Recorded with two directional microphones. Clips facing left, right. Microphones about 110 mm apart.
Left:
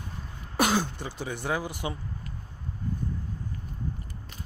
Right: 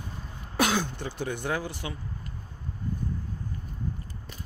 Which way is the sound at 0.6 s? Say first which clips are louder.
Left 1 dB; 5° left (ahead or behind).